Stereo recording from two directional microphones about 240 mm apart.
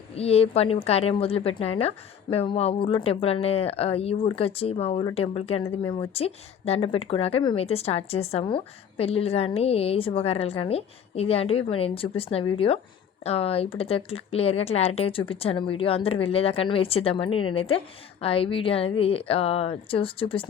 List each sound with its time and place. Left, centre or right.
0.2 s speech: left